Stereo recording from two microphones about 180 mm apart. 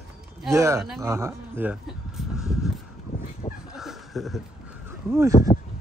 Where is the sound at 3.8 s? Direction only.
Centre (ahead or behind).